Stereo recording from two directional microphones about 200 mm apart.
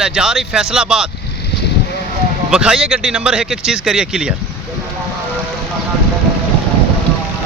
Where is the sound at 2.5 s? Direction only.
5° right (ahead or behind).